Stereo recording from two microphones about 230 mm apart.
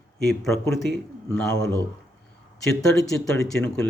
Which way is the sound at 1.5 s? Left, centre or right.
Right.